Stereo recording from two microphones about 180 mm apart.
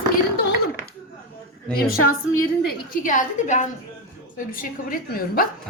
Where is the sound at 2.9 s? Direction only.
45° left (ahead or behind).